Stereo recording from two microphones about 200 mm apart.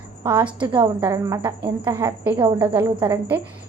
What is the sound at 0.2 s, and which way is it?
A woman's voice, 20° right (ahead or behind).